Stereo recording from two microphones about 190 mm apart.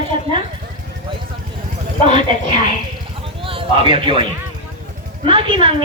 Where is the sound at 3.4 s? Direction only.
30° right (ahead or behind).